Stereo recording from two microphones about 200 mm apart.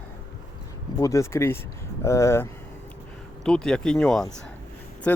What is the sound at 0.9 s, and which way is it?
Speech, 15° left (ahead or behind).